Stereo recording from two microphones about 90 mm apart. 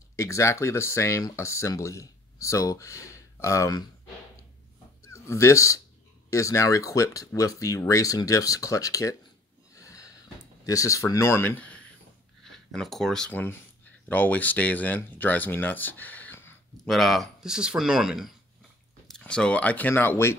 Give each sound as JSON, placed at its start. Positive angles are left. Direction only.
{"t": 0.1, "sound": "speech", "side_deg": 35}
{"t": 5.0, "sound": "speech", "side_deg": 35}
{"t": 9.8, "sound": "a sound", "side_deg": 40}
{"t": 10.6, "sound": "speech", "side_deg": 40}
{"t": 12.4, "sound": "speech", "side_deg": 5}
{"t": 13.3, "sound": "speech", "side_deg": 20}
{"t": 16.8, "sound": "speech", "side_deg": 0}
{"t": 19.0, "sound": "speech", "side_deg": 10}